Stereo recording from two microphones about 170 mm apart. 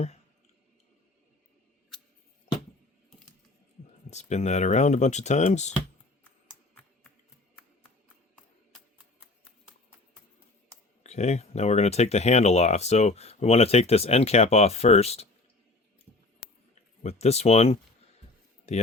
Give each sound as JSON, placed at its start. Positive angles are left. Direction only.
{"t": 4.1, "sound": "speech", "side_deg": 40}
{"t": 11.0, "sound": "speech", "side_deg": 40}
{"t": 17.0, "sound": "speech", "side_deg": 40}